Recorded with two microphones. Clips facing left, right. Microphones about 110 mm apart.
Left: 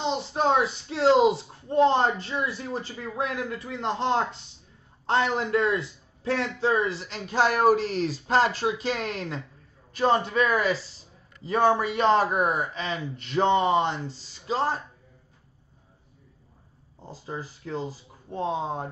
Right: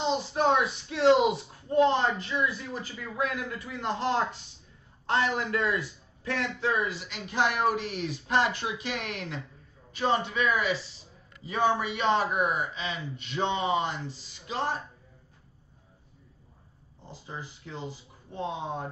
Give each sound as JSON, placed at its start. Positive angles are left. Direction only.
{"t": 0.1, "sound": "speech", "side_deg": 30}
{"t": 13.7, "sound": "speech", "side_deg": 30}
{"t": 17.0, "sound": "speech", "side_deg": 40}